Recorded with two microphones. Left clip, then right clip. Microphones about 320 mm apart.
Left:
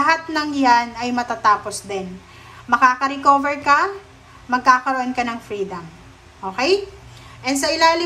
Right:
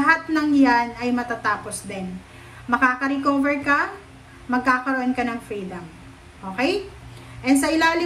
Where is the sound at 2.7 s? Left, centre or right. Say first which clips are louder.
Left 4 dB; centre.